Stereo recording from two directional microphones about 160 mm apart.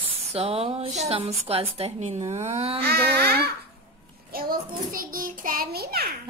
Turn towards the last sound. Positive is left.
turn(degrees=-75)  # may be behind; listen again after turning